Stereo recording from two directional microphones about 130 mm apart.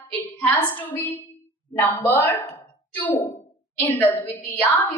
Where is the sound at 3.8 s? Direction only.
15° left (ahead or behind).